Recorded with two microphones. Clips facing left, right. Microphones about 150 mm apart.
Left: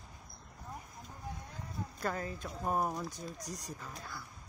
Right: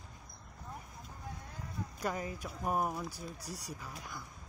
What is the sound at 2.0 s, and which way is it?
Speech, 10° right (ahead or behind).